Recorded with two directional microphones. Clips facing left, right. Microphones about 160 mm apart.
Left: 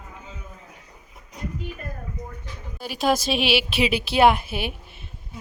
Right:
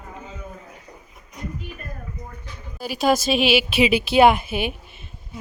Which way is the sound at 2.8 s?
Centre (ahead or behind).